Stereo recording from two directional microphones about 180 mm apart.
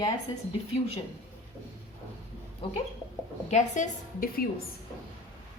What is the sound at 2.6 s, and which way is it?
Speech, 30° left (ahead or behind).